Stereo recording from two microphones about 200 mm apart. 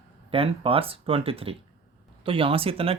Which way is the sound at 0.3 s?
30° right (ahead or behind).